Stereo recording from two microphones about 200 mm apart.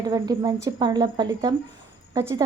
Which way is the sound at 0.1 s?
20° right (ahead or behind).